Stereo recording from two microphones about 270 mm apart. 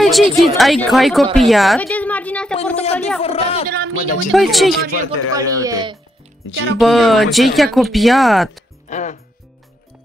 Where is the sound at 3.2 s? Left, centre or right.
Left.